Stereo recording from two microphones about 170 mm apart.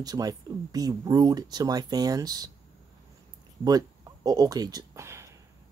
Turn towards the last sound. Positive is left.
turn(degrees=-15)  # may be behind; listen again after turning